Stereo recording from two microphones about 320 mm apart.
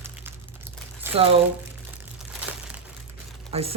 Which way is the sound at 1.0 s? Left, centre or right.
Centre.